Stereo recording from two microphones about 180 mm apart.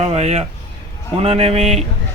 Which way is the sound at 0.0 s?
35° right (ahead or behind).